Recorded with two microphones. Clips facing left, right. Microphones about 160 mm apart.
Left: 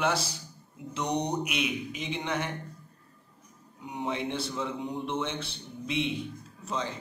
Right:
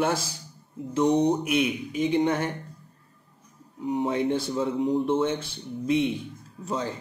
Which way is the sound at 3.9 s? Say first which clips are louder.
Right 8 dB; 45° right (ahead or behind).